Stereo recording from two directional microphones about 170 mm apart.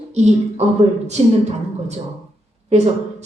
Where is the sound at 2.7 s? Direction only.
40° right (ahead or behind).